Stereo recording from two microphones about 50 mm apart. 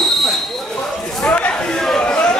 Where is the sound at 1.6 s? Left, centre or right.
Centre.